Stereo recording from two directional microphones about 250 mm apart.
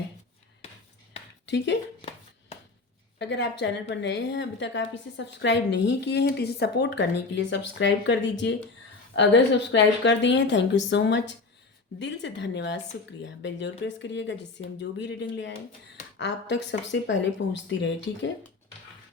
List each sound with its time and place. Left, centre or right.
1.5 s a woman's voice: left
2.0 s hands: left
3.2 s a woman's voice: left